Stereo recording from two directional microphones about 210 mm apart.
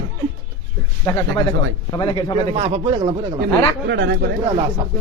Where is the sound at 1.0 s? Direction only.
15° left (ahead or behind).